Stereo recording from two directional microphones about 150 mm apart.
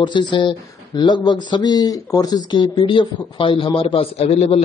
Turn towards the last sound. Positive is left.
turn(degrees=45)  # may be behind; listen again after turning